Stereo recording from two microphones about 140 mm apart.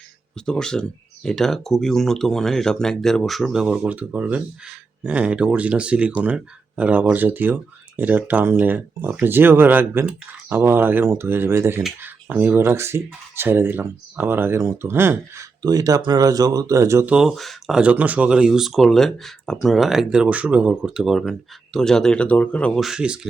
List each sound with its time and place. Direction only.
0.3 s speech: 5° left (ahead or behind); by 17.1 s 20° right (ahead or behind)
17.1 s speech: 5° right (ahead or behind)